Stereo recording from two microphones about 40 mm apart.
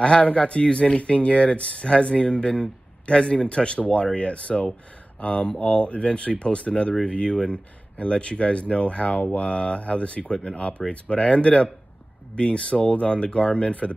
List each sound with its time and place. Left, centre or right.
0.0 s speech: left